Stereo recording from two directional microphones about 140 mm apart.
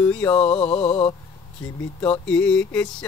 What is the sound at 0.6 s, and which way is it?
Mantra, 40° left (ahead or behind).